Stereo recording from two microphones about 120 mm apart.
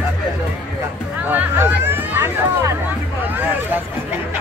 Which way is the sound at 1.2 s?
15° right (ahead or behind).